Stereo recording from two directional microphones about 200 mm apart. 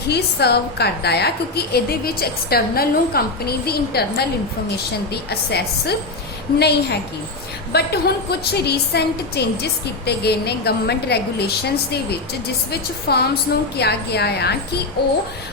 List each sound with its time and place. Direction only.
0.1 s a woman's voice: 55° left (ahead or behind)
13.1 s a woman's voice: 50° left (ahead or behind)